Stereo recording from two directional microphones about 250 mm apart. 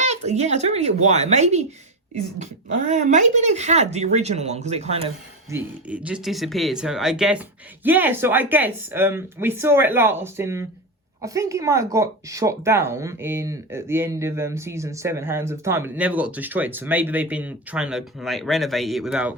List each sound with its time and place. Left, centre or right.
0.0 s speech: right
5.5 s speech: centre